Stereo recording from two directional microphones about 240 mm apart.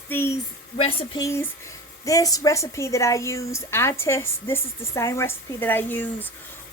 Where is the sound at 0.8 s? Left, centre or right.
Left.